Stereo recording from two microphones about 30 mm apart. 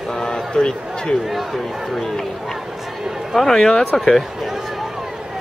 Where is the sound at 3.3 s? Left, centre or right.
Centre.